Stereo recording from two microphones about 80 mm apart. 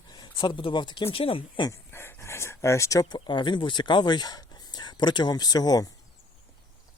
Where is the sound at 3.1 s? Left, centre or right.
Left.